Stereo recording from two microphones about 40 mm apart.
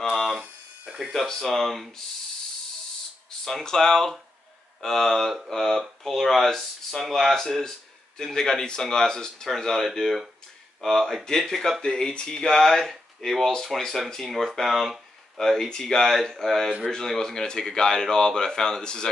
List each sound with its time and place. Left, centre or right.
1.1 s speech: centre
3.6 s speech: centre
5.1 s speech: centre; by 19.0 s left